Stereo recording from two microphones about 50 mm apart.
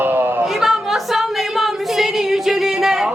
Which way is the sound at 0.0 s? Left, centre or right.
Right.